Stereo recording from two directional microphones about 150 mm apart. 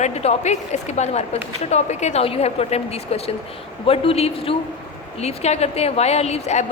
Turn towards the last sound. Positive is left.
turn(degrees=50)  # may be behind; listen again after turning